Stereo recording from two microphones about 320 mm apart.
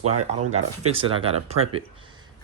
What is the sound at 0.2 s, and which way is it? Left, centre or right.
Speech, centre.